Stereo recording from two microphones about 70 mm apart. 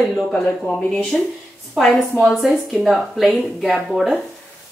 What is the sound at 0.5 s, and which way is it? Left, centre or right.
Speech, left.